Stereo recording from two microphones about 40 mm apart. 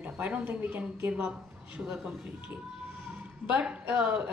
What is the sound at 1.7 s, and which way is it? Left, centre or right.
Speech, right.